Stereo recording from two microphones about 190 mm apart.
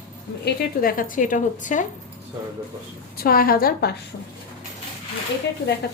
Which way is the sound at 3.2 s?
50° left (ahead or behind).